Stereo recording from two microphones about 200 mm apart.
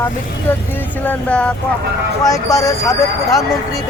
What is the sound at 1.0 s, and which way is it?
Speech, 5° left (ahead or behind).